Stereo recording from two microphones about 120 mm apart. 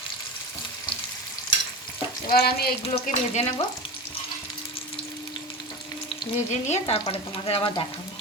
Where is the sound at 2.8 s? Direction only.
60° left (ahead or behind).